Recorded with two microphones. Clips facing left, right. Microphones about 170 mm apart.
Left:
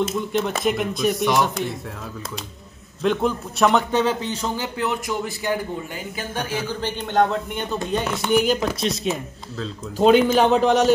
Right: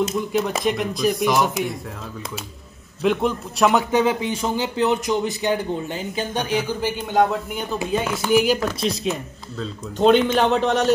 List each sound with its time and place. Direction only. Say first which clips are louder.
0.0 s speech: right 1 dB; centre (ahead or behind)
3.0 s speech: right 1 dB; centre (ahead or behind)
3.9 s speech: right 2 dB; 15° right (ahead or behind)